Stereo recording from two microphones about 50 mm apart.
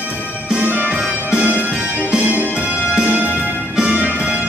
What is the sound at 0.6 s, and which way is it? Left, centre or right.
Music, right.